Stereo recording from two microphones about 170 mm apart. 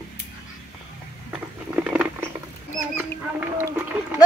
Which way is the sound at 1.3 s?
10° right (ahead or behind).